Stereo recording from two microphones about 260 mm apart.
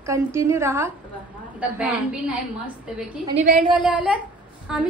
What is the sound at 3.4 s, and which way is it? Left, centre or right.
Speech, right.